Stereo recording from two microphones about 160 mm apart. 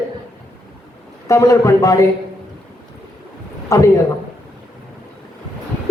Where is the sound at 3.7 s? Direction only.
20° left (ahead or behind).